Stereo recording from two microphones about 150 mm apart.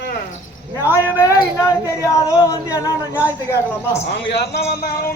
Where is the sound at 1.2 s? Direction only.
20° left (ahead or behind).